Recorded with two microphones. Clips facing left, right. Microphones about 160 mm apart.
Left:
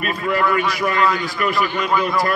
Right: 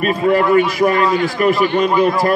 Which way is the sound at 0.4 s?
25° right (ahead or behind).